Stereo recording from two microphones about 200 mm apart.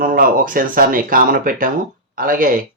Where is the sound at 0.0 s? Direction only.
45° right (ahead or behind).